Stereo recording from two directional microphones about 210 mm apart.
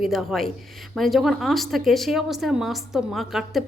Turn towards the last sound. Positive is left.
turn(degrees=0)  # may be behind; listen again after turning